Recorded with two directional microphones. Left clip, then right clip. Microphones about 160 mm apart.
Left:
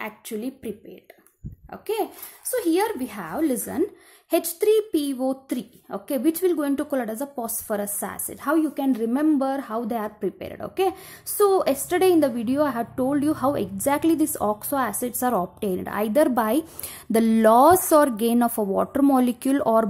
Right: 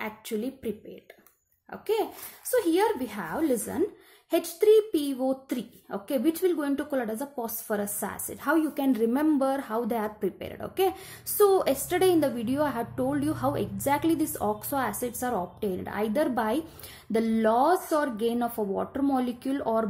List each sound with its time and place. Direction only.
0.0 s a woman's voice: 15° left (ahead or behind); by 19.9 s 35° left (ahead or behind)